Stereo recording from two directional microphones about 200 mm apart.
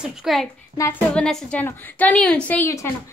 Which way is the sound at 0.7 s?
25° right (ahead or behind).